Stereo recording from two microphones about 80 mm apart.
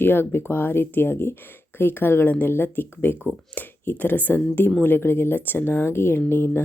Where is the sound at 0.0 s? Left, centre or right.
Left.